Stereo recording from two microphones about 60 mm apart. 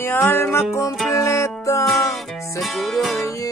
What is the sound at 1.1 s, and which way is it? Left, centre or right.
Music, left.